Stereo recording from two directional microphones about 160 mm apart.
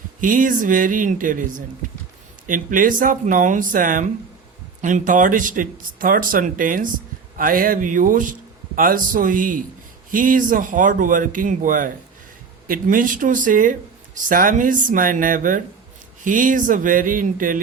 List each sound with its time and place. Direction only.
0.2 s a man's voice: 55° right (ahead or behind)